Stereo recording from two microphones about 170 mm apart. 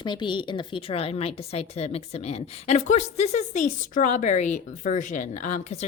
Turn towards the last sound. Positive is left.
turn(degrees=45)  # may be behind; listen again after turning